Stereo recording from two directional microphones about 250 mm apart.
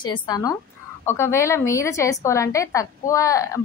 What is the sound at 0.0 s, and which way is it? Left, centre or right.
A woman's voice, centre.